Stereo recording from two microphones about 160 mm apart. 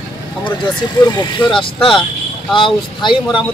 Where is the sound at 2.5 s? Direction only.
30° left (ahead or behind).